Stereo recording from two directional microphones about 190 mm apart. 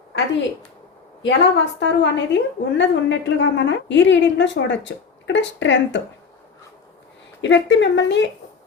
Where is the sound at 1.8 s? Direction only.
70° left (ahead or behind).